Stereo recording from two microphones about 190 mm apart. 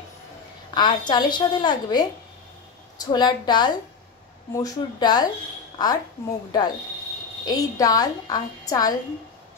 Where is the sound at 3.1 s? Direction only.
20° left (ahead or behind).